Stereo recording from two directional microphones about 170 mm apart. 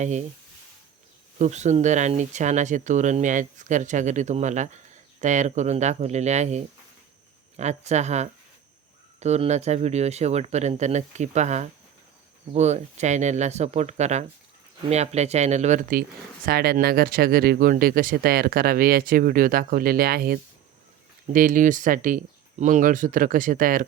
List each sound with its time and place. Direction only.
0.0 s speech: 45° right (ahead or behind)
1.4 s speech: 45° right (ahead or behind)
16.5 s speech: 65° right (ahead or behind)